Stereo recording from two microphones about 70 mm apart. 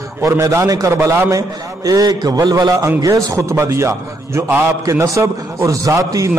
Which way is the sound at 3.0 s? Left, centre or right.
Right.